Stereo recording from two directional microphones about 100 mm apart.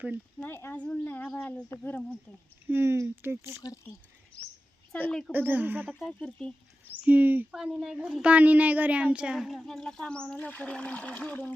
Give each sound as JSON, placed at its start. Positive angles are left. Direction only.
{"t": 0.4, "sound": "speech", "side_deg": 20}
{"t": 2.6, "sound": "speech", "side_deg": -25}
{"t": 4.9, "sound": "speech", "side_deg": 15}
{"t": 5.3, "sound": "speech", "side_deg": -20}
{"t": 6.1, "sound": "speech", "side_deg": 5}
{"t": 7.0, "sound": "speech", "side_deg": -15}
{"t": 7.5, "sound": "a woman's voice", "side_deg": -5}